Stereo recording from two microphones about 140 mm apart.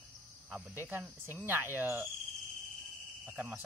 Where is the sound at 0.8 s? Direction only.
15° right (ahead or behind).